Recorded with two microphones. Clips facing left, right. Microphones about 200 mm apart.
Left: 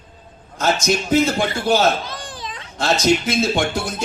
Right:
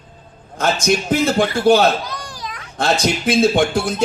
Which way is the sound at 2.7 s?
55° right (ahead or behind).